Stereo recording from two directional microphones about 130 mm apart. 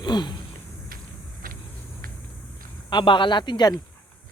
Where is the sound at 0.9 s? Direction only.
90° right.